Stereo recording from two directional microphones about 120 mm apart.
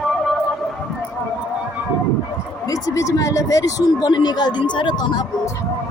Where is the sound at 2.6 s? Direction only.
30° left (ahead or behind).